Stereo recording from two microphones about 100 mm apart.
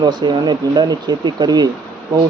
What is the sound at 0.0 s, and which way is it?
Speech, 45° right (ahead or behind).